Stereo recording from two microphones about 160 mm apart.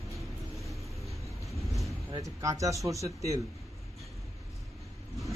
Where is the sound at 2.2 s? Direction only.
20° right (ahead or behind).